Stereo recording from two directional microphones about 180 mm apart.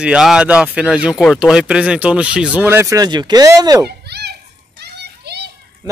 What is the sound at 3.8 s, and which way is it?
Children playing, 65° right (ahead or behind).